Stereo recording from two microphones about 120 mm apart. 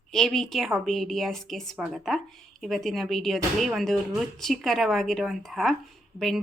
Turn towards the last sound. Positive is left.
turn(degrees=0)  # may be behind; listen again after turning